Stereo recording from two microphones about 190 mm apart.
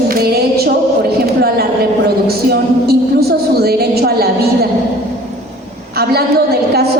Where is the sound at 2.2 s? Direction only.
55° right (ahead or behind).